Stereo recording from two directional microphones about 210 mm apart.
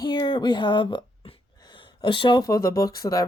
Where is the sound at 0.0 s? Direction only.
20° left (ahead or behind).